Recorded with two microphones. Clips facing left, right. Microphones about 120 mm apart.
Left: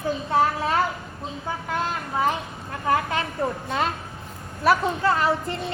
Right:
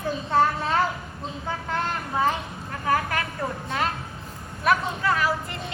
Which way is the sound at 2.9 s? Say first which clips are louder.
Left 1 dB; 20° left (ahead or behind).